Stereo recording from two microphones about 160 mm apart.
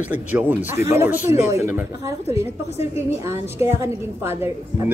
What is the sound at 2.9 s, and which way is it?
Speech, 15° right (ahead or behind).